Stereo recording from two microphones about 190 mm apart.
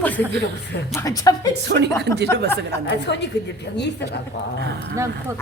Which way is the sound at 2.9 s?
65° left (ahead or behind).